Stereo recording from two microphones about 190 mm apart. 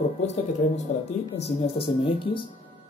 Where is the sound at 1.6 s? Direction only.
30° left (ahead or behind).